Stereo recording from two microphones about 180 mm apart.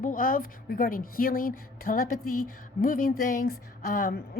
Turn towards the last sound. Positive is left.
turn(degrees=55)  # may be behind; listen again after turning